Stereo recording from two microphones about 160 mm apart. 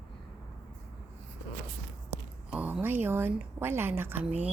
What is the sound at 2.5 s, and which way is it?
A woman's voice, 10° right (ahead or behind).